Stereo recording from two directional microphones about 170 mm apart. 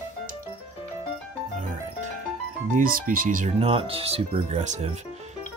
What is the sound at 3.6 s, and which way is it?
Speech, 35° right (ahead or behind).